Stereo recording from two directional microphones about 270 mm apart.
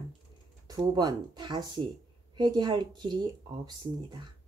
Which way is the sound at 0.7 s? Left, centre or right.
Centre.